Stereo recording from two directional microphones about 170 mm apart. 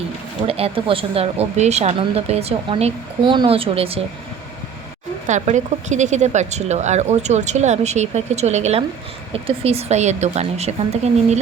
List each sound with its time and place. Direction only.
0.4 s speech: 35° right (ahead or behind)
5.3 s speech: 45° right (ahead or behind)